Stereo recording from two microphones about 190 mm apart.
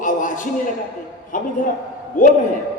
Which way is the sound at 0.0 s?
45° left (ahead or behind).